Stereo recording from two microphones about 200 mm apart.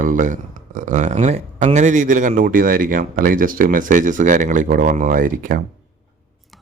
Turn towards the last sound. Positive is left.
turn(degrees=0)  # may be behind; listen again after turning